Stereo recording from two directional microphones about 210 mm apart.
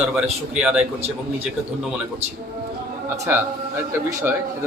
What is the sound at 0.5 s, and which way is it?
Speech, 5° right (ahead or behind).